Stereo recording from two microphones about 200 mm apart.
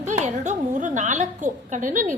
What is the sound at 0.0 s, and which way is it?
A woman's voice, 35° right (ahead or behind).